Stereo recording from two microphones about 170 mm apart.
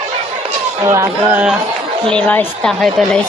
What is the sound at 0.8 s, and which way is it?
Speech, 15° right (ahead or behind).